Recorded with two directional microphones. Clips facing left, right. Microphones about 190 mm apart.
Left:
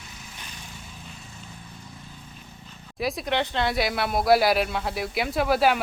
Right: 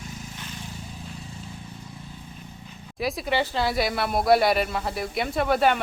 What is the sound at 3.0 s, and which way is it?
Speech, centre (ahead or behind).